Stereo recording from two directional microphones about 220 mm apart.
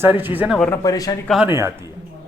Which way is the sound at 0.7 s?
15° left (ahead or behind).